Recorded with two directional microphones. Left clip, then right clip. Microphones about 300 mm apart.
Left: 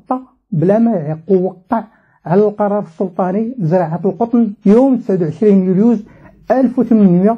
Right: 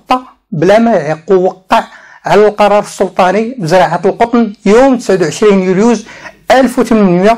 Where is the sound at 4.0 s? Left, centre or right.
Right.